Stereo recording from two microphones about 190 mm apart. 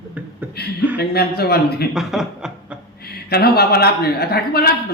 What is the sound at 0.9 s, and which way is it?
Speech, 55° left (ahead or behind).